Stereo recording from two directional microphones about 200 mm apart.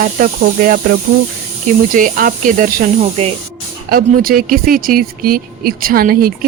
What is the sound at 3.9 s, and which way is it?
Speech, 45° right (ahead or behind).